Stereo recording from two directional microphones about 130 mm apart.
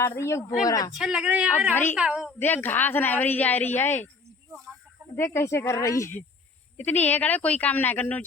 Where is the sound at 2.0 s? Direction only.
5° right (ahead or behind).